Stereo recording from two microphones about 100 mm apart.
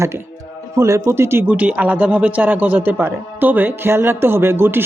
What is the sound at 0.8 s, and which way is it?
Speech, 30° right (ahead or behind).